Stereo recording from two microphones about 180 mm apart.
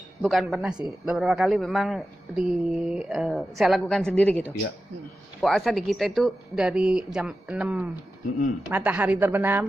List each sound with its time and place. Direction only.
0.2 s a woman's voice: centre (ahead or behind)